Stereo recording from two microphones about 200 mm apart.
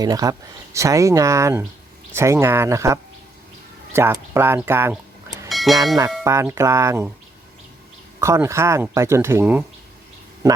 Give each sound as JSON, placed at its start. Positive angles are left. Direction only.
{"t": 0.0, "sound": "speech", "side_deg": -20}
{"t": 5.5, "sound": "a sound", "side_deg": 0}
{"t": 6.2, "sound": "speech", "side_deg": -15}
{"t": 8.2, "sound": "speech", "side_deg": -15}